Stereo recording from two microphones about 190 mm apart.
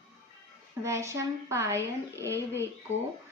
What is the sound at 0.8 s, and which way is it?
A woman's voice, 15° right (ahead or behind).